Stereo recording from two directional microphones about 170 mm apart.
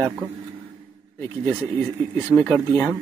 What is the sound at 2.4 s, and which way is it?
Speech, 5° left (ahead or behind).